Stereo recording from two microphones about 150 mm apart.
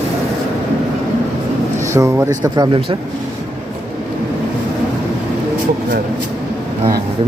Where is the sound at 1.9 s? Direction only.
20° right (ahead or behind).